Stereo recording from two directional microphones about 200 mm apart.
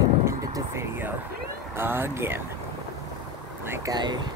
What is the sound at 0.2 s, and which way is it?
Vehicle, 15° right (ahead or behind).